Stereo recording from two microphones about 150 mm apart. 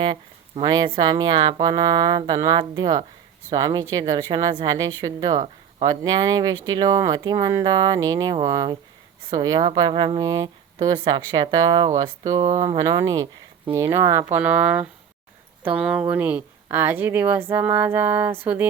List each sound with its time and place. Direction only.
0.0 s speech: 30° right (ahead or behind); by 18.7 s 10° right (ahead or behind)